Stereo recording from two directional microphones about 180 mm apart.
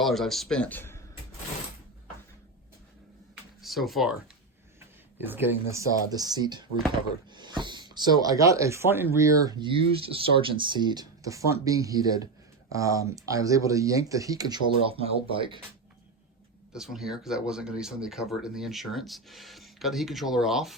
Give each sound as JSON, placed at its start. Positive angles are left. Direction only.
{"t": 0.0, "sound": "speech", "side_deg": 0}
{"t": 3.6, "sound": "speech", "side_deg": 0}
{"t": 5.2, "sound": "speech", "side_deg": -10}
{"t": 16.7, "sound": "speech", "side_deg": 0}